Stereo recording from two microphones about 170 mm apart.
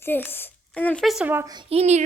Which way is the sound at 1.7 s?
40° right (ahead or behind).